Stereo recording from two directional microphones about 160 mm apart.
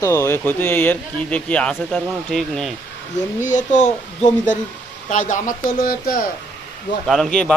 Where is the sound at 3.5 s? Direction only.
50° left (ahead or behind).